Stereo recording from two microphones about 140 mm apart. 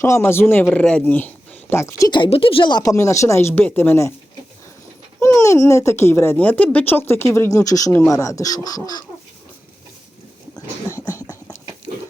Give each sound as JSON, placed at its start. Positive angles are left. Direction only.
{"t": 0.0, "sound": "speech", "side_deg": 20}
{"t": 5.2, "sound": "speech", "side_deg": 20}
{"t": 11.0, "sound": "a sound", "side_deg": 25}